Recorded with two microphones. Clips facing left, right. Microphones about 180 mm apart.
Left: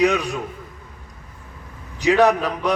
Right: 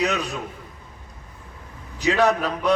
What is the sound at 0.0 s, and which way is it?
Speech, 15° left (ahead or behind).